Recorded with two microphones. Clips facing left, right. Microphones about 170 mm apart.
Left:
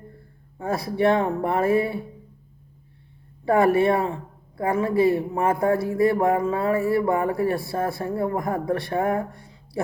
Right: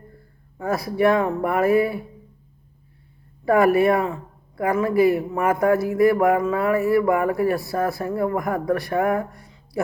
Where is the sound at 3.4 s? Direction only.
25° left (ahead or behind).